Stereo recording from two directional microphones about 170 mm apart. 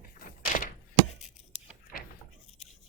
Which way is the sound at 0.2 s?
50° left (ahead or behind).